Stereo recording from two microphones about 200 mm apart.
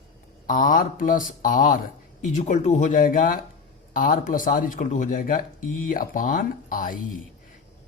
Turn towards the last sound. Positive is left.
turn(degrees=45)  # may be behind; listen again after turning